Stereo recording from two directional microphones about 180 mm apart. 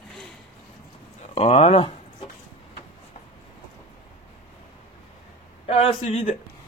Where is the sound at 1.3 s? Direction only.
35° left (ahead or behind).